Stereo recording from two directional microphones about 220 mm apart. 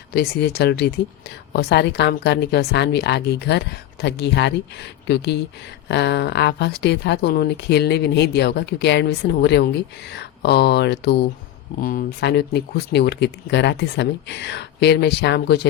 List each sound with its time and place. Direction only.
0.1 s speech: 45° left (ahead or behind)